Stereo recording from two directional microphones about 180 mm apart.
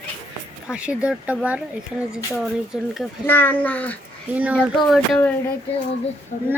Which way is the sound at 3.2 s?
10° left (ahead or behind).